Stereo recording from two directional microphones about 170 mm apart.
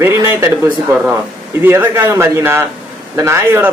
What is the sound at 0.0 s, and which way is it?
Speech, 15° right (ahead or behind).